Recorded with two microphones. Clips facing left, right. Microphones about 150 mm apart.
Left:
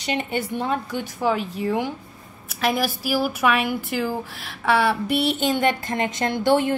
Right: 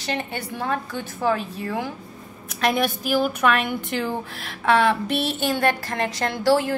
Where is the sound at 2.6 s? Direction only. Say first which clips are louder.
Right 1 dB; 5° left (ahead or behind).